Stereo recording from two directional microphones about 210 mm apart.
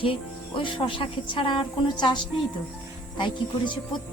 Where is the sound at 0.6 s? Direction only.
25° left (ahead or behind).